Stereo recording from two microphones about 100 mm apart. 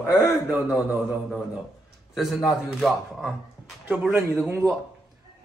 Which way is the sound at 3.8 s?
15° right (ahead or behind).